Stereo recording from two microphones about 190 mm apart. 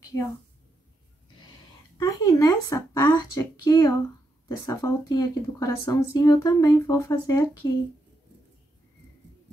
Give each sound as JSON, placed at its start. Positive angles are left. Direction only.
{"t": 2.0, "sound": "speech", "side_deg": 15}